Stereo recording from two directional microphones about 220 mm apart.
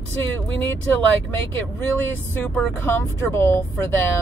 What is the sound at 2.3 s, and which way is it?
Speech, 10° left (ahead or behind).